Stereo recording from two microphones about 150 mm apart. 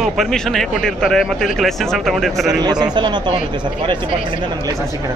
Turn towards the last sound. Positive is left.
turn(degrees=-30)  # may be behind; listen again after turning